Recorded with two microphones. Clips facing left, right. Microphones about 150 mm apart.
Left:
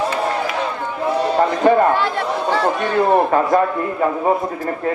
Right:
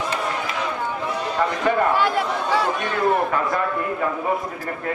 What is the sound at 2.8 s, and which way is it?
A man's voice, 35° left (ahead or behind).